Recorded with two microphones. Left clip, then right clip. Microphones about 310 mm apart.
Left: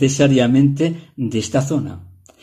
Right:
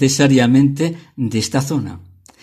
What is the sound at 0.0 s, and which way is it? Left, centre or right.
Speech, right.